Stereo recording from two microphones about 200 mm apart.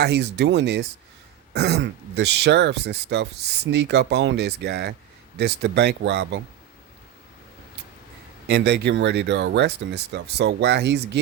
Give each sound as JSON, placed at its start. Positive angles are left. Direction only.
{"t": 0.0, "sound": "speech", "side_deg": -60}
{"t": 8.4, "sound": "speech", "side_deg": -55}